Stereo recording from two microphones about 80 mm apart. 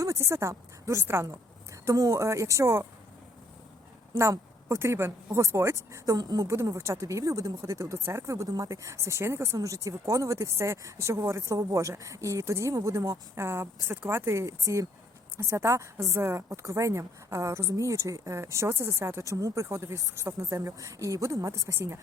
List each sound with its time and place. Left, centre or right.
0.0 s a woman's voice: right
4.1 s a woman's voice: right
6.1 s speech: right
6.5 s a woman's voice: right